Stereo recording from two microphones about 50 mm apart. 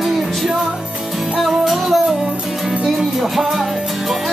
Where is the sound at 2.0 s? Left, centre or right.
Centre.